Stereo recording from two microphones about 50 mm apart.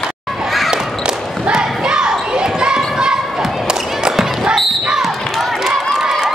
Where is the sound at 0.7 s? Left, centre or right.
Centre.